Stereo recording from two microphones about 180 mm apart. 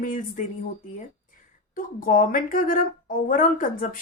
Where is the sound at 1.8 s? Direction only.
50° left (ahead or behind).